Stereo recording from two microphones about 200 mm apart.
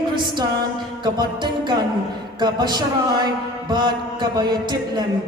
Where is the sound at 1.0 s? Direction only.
20° right (ahead or behind).